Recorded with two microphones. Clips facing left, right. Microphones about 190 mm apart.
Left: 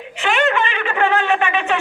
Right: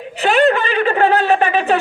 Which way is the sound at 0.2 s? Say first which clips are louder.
Right 5 dB; 35° right (ahead or behind).